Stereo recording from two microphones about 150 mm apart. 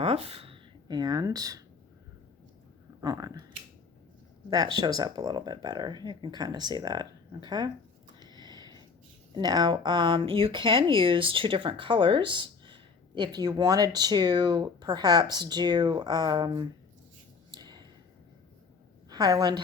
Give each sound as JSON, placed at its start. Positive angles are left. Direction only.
{"t": 0.0, "sound": "speech", "side_deg": -40}
{"t": 3.0, "sound": "speech", "side_deg": -25}
{"t": 4.4, "sound": "speech", "side_deg": -25}
{"t": 8.2, "sound": "a sound", "side_deg": -30}
{"t": 9.3, "sound": "speech", "side_deg": -25}
{"t": 17.5, "sound": "a sound", "side_deg": -25}
{"t": 19.1, "sound": "speech", "side_deg": -25}